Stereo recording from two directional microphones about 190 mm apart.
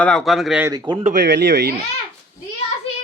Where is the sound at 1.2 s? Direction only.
65° right (ahead or behind).